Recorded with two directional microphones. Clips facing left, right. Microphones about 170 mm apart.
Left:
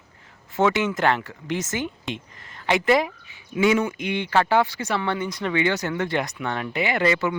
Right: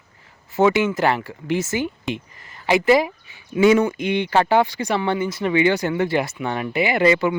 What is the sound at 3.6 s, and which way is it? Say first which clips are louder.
Speech: right 5 dB; 40° right (ahead or behind).